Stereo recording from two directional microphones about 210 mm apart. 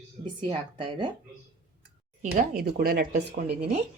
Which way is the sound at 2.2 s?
40° right (ahead or behind).